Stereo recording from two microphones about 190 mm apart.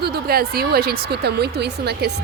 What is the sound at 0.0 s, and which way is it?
Speech, 55° right (ahead or behind).